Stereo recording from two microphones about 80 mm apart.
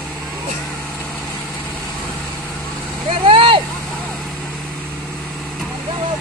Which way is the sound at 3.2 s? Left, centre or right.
Right.